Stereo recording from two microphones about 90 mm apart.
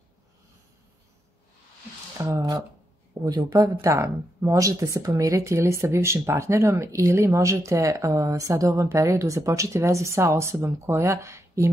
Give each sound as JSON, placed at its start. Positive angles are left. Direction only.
{"t": 2.1, "sound": "speech", "side_deg": -35}